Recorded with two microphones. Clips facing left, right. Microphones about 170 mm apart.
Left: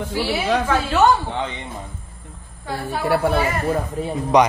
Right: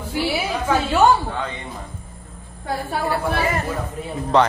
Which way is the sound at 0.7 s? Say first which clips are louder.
Right 3 dB; 10° right (ahead or behind).